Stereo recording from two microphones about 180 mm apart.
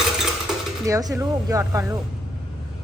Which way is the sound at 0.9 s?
20° right (ahead or behind).